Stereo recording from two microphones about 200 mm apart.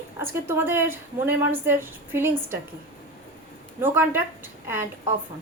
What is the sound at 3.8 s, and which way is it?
A woman's voice, 10° right (ahead or behind).